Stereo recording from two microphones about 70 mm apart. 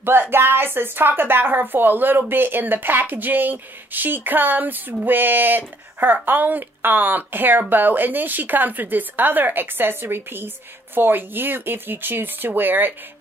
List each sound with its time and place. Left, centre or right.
0.0 s speech: right